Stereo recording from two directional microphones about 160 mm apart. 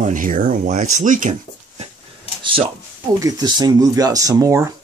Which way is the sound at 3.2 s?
25° right (ahead or behind).